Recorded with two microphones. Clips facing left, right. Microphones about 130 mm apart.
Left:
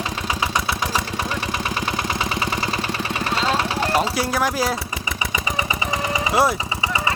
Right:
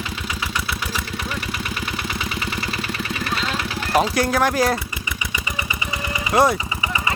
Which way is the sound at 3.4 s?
35° left (ahead or behind).